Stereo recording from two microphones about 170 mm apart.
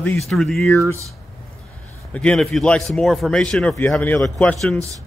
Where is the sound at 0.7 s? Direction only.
15° left (ahead or behind).